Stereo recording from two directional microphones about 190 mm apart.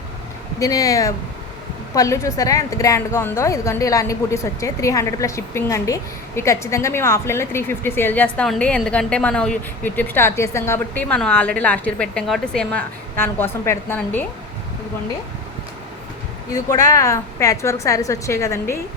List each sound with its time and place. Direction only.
0.6 s a woman's voice: 20° left (ahead or behind)
16.5 s a woman's voice: 20° left (ahead or behind)